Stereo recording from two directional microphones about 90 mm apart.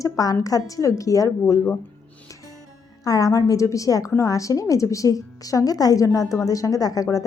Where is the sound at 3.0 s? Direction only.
40° left (ahead or behind).